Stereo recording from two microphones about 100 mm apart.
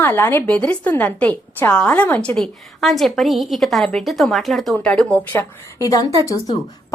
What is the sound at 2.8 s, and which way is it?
A woman's voice, centre (ahead or behind).